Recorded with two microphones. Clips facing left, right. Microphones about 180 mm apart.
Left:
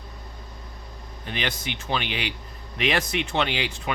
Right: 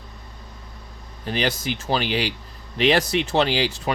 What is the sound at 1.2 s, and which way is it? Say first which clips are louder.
Speech: right 6 dB; 35° right (ahead or behind).